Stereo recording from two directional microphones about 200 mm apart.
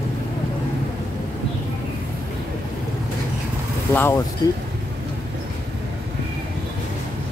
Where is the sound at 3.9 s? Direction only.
10° left (ahead or behind).